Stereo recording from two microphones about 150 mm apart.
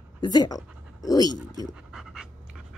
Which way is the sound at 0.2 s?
25° left (ahead or behind).